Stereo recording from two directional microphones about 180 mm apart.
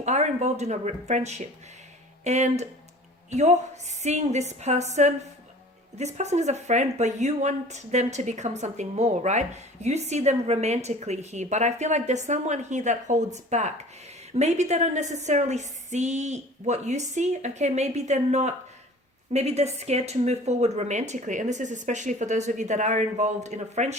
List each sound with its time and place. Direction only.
0.0 s speech: 40° right (ahead or behind)